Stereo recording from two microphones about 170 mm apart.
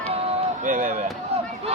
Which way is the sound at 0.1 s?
35° right (ahead or behind).